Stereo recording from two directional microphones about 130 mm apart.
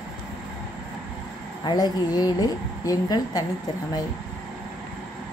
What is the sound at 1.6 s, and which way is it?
A woman's voice, 35° left (ahead or behind).